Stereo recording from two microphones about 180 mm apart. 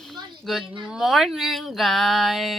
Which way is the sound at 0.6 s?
30° right (ahead or behind).